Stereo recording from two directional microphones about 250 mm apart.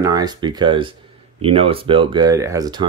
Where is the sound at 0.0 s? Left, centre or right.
Centre.